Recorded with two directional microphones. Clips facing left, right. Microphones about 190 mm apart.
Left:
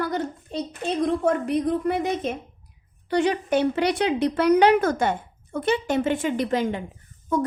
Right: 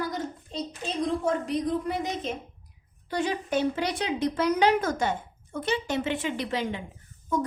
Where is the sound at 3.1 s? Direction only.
65° left (ahead or behind).